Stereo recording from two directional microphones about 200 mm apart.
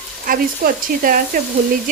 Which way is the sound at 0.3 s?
45° right (ahead or behind).